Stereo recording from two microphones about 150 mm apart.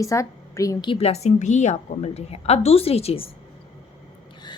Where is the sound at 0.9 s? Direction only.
45° left (ahead or behind).